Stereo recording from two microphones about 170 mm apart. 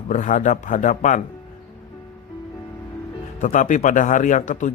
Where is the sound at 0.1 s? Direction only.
50° left (ahead or behind).